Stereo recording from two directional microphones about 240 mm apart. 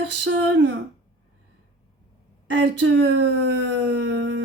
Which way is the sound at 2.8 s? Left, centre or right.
Right.